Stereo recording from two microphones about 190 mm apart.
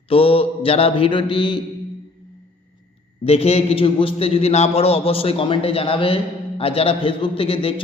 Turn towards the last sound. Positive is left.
turn(degrees=30)  # may be behind; listen again after turning